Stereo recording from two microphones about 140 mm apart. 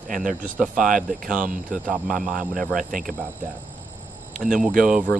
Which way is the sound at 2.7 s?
75° right (ahead or behind).